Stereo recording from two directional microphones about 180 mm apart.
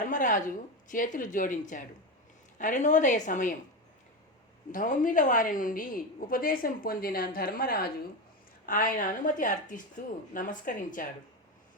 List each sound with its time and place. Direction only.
0.0 s a woman's voice: 45° left (ahead or behind)
4.7 s a woman's voice: 50° left (ahead or behind)